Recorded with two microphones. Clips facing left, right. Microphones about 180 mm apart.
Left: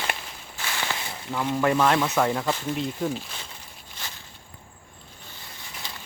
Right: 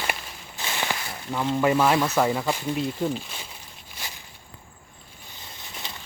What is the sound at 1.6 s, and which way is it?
Speech, 10° right (ahead or behind).